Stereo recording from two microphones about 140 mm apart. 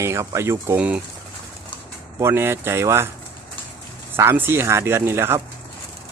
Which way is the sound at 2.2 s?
20° right (ahead or behind).